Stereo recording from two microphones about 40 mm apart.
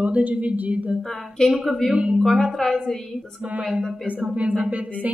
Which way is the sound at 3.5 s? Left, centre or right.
Right.